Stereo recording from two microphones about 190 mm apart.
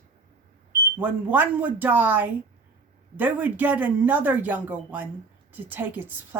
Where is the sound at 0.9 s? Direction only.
10° right (ahead or behind).